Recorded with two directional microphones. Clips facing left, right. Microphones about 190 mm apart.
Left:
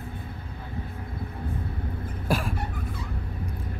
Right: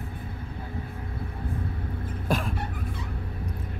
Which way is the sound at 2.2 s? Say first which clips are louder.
Left 1 dB; 5° left (ahead or behind).